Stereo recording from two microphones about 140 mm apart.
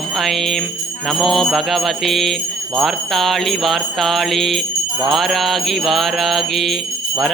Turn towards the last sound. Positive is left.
turn(degrees=0)  # may be behind; listen again after turning